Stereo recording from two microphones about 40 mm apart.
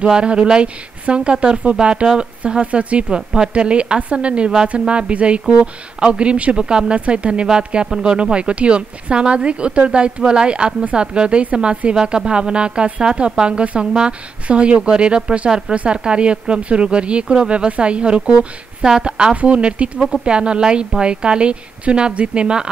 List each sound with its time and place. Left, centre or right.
0.0 s speech: right
6.6 s speech: right